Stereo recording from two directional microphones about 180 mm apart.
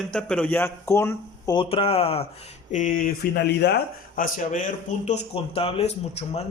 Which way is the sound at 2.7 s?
45° left (ahead or behind).